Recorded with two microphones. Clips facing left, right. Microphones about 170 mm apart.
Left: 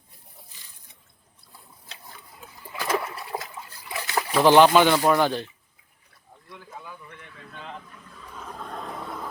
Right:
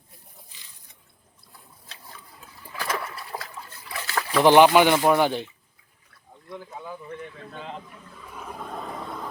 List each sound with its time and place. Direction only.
2.8 s splash: 25° left (ahead or behind)
3.8 s trickle: 25° left (ahead or behind)
4.4 s speech: 15° right (ahead or behind)
6.9 s speech: 30° right (ahead or behind)
7.9 s toilet flush: 10° right (ahead or behind)